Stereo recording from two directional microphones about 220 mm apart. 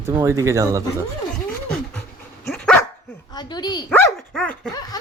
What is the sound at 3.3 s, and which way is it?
Bow-wow, 20° left (ahead or behind).